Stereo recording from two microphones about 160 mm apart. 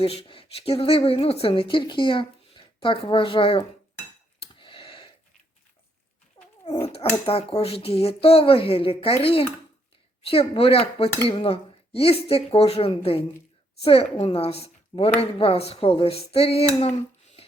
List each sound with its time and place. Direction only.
0.0 s speech: 35° left (ahead or behind)
4.4 s a sound: 35° left (ahead or behind)
6.4 s dog: 20° left (ahead or behind)
6.8 s speech: 35° left (ahead or behind)